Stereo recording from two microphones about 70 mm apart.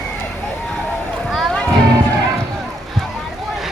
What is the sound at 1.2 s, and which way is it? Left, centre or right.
Music, centre.